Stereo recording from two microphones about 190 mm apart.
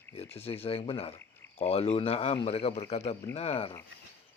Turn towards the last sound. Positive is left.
turn(degrees=30)  # may be behind; listen again after turning